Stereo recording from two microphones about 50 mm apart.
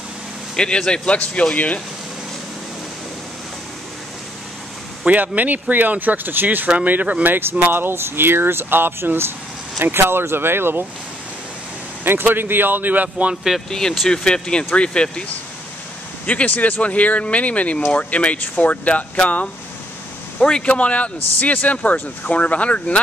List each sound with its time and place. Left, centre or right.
0.6 s speech: centre
5.0 s speech: right
7.3 s speech: right
12.0 s speech: right
13.3 s speech: centre
13.7 s speech: centre
16.3 s a man's voice: left